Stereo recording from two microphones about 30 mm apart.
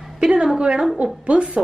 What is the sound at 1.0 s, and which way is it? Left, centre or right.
Speech, right.